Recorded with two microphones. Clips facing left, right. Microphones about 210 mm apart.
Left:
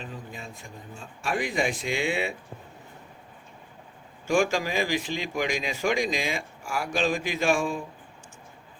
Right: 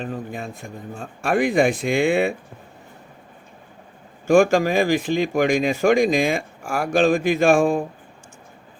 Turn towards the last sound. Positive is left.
turn(degrees=-55)  # may be behind; listen again after turning